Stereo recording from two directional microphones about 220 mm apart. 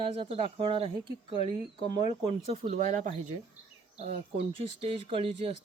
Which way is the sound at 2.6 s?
30° right (ahead or behind).